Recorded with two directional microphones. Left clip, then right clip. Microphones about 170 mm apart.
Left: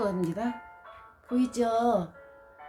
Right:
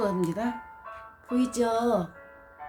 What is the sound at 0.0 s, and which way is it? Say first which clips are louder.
Speech: right 2 dB; 5° left (ahead or behind).